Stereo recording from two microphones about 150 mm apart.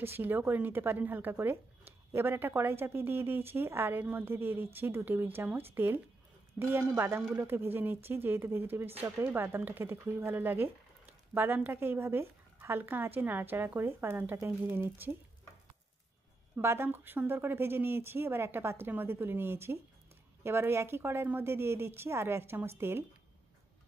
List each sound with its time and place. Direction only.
0.0 s speech: 15° right (ahead or behind)
16.5 s speech: 15° right (ahead or behind)